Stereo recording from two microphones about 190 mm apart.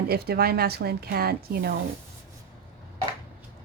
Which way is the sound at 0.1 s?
55° right (ahead or behind).